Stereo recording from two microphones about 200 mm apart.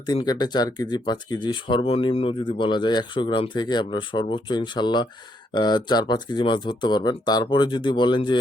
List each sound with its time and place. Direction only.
0.0 s speech: 20° left (ahead or behind)